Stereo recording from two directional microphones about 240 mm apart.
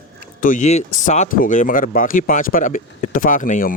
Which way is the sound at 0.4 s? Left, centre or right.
Left.